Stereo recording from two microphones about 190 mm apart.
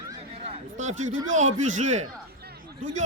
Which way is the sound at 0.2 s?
30° right (ahead or behind).